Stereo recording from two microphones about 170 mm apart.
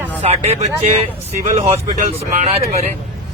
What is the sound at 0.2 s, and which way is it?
Speech, 40° right (ahead or behind).